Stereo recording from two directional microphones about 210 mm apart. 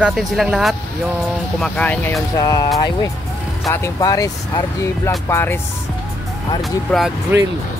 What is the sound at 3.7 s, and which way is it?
Speech, 15° left (ahead or behind).